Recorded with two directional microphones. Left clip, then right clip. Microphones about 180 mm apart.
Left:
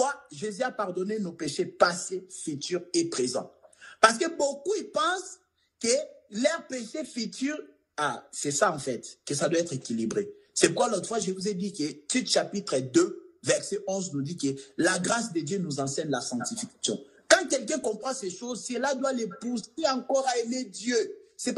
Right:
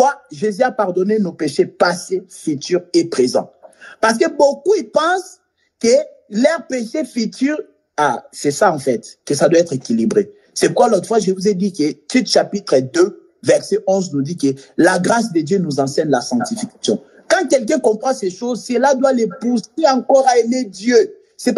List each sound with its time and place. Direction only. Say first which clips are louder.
0.0 s speech: right 14 dB; 45° right (ahead or behind)